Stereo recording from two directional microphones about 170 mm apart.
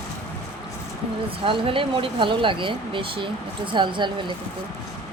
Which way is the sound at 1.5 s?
30° right (ahead or behind).